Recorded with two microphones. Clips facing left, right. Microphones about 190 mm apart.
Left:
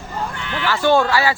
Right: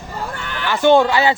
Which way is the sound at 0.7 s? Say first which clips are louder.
Right 3 dB; 20° right (ahead or behind).